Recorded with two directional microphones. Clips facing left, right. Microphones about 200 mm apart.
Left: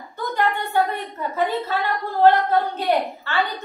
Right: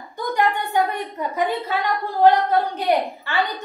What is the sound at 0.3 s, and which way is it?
A woman's voice, 15° right (ahead or behind).